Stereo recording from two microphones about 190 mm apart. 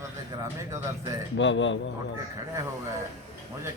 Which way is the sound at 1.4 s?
75° left (ahead or behind).